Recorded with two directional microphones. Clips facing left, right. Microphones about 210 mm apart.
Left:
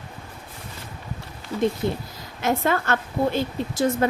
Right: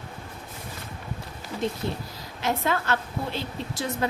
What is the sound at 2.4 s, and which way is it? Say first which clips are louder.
A woman's voice: left 4 dB; 50° left (ahead or behind).